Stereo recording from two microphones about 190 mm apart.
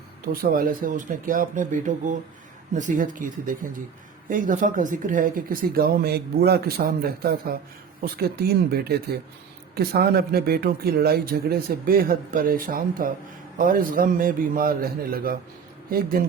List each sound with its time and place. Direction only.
0.3 s speech: 50° right (ahead or behind)